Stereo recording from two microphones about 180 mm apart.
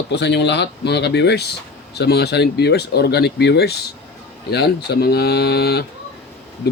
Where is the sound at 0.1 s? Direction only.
70° left (ahead or behind).